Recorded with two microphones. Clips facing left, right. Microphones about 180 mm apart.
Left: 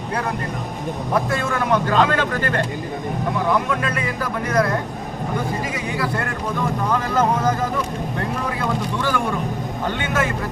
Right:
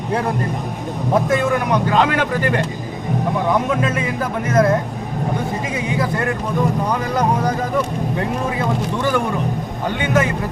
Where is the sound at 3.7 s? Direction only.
20° right (ahead or behind).